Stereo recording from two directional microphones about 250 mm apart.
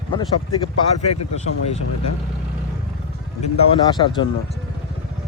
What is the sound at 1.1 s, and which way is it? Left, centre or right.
Speech, left.